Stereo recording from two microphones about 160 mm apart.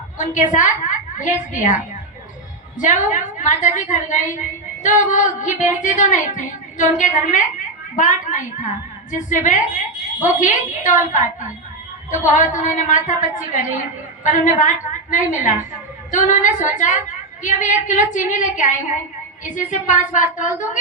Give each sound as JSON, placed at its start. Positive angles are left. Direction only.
{"t": 0.2, "sound": "a woman's voice", "side_deg": 50}